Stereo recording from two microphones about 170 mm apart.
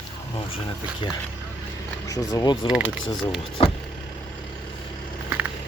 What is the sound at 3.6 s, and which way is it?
Vehicle, 30° left (ahead or behind).